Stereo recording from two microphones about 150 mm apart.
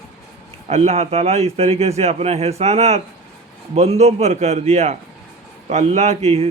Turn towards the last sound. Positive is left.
turn(degrees=-45)  # may be behind; listen again after turning